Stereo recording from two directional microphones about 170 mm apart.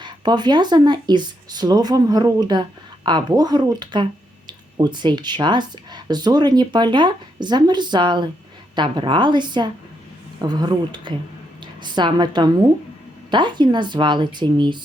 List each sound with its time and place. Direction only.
0.0 s a woman's voice: 25° right (ahead or behind)